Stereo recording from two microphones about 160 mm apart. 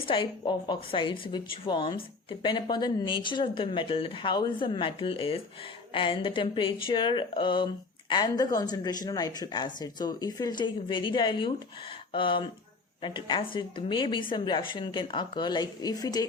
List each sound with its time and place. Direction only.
0.0 s speech: 30° left (ahead or behind)